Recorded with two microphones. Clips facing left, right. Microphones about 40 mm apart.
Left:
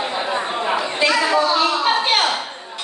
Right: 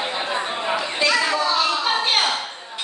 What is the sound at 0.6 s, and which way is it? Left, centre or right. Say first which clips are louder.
Chatter: left 3 dB; centre.